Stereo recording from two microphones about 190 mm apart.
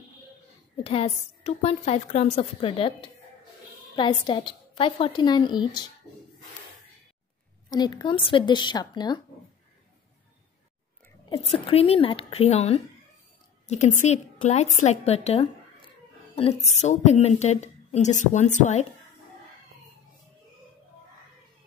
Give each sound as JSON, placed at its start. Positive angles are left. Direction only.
{"t": 0.8, "sound": "a woman's voice", "side_deg": 30}
{"t": 7.7, "sound": "a woman's voice", "side_deg": 25}
{"t": 11.2, "sound": "a woman's voice", "side_deg": 30}